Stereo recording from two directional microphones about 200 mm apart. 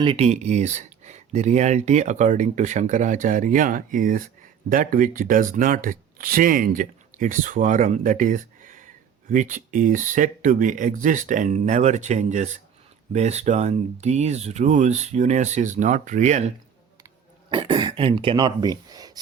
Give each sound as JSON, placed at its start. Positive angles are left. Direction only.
{"t": 0.0, "sound": "speech", "side_deg": -30}
{"t": 17.5, "sound": "speech", "side_deg": -25}